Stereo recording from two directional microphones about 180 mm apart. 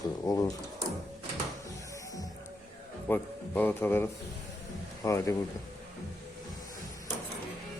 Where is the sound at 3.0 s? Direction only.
10° left (ahead or behind).